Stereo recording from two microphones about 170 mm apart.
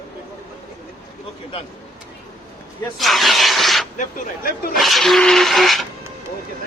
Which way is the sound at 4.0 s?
55° left (ahead or behind).